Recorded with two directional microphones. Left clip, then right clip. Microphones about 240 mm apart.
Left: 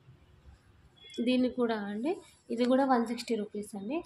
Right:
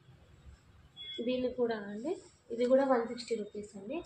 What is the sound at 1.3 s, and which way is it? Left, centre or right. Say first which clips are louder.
A woman's voice: left 3 dB; left.